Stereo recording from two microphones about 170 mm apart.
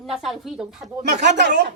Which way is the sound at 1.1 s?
85° right.